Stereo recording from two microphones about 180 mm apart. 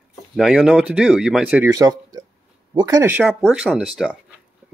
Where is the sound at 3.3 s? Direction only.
Centre (ahead or behind).